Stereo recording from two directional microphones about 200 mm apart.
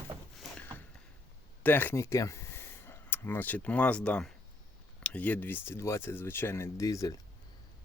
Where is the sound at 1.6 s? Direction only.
10° left (ahead or behind).